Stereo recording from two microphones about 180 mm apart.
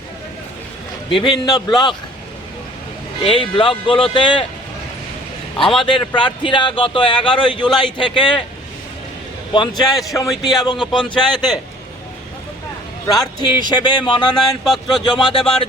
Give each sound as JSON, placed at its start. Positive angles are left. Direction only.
{"t": 1.1, "sound": "speech", "side_deg": 25}
{"t": 3.2, "sound": "speech", "side_deg": 30}
{"t": 5.7, "sound": "speech", "side_deg": 25}
{"t": 9.5, "sound": "speech", "side_deg": 25}
{"t": 13.1, "sound": "speech", "side_deg": 20}
{"t": 14.3, "sound": "speech", "side_deg": 0}
{"t": 15.0, "sound": "speech", "side_deg": 25}